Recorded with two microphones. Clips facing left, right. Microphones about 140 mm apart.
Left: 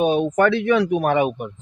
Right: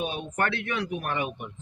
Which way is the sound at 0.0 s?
90° left.